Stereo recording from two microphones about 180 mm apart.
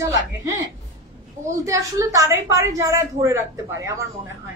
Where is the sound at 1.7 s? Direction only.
20° right (ahead or behind).